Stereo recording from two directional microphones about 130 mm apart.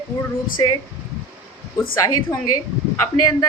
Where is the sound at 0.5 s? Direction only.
30° left (ahead or behind).